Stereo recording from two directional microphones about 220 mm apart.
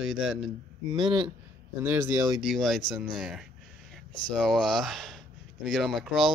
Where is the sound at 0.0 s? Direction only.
Centre (ahead or behind).